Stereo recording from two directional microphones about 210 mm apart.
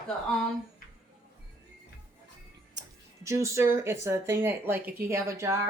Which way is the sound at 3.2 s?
15° right (ahead or behind).